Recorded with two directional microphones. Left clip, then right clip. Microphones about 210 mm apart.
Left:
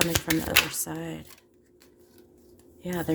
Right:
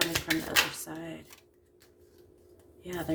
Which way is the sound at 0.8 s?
50° left (ahead or behind).